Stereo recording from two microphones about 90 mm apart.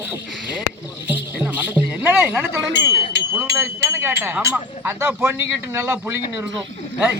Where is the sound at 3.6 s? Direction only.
30° right (ahead or behind).